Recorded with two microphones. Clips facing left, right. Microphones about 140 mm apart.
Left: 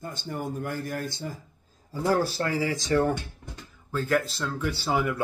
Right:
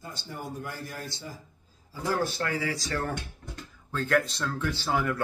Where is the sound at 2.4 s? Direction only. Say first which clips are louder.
Left 3 dB; 30° left (ahead or behind).